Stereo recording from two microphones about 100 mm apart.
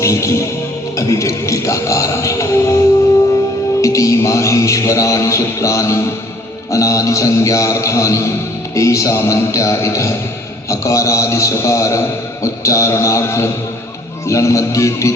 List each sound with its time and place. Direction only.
0.0 s music: 30° left (ahead or behind)
10.7 s a man's voice: 30° left (ahead or behind)
14.3 s music: 30° left (ahead or behind)